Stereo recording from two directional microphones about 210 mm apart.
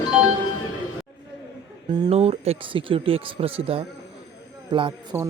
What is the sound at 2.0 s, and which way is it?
Speech, 30° right (ahead or behind).